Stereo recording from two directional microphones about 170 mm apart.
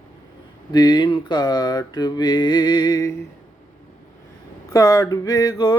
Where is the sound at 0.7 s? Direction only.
25° left (ahead or behind).